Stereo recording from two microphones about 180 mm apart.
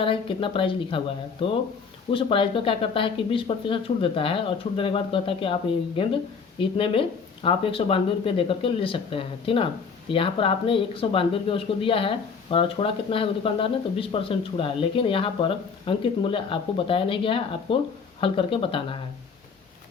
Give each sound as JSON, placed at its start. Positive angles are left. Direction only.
{"t": 0.0, "sound": "speech", "side_deg": 30}